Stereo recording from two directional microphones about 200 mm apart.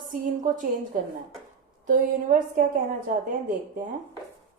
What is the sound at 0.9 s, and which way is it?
A woman's voice, 40° right (ahead or behind).